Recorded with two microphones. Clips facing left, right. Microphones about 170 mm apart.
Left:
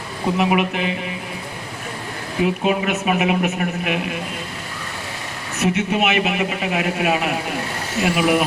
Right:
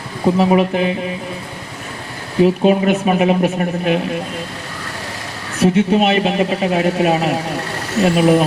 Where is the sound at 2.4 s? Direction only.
30° right (ahead or behind).